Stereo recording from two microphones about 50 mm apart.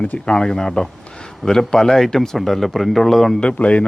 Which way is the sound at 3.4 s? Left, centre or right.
Left.